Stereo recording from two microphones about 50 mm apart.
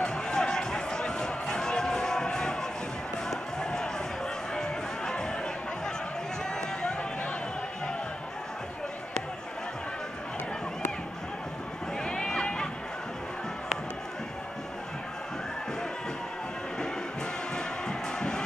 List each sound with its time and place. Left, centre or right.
0.0 s run: centre
3.3 s basketball bounce: centre
4.6 s run: centre
6.8 s a sound: centre
12.0 s a sound: centre
17.6 s music: centre